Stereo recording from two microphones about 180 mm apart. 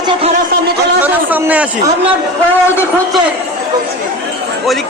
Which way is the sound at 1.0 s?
10° right (ahead or behind).